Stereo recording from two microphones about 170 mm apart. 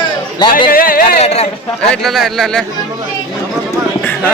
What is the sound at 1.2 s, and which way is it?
Speech, 40° left (ahead or behind).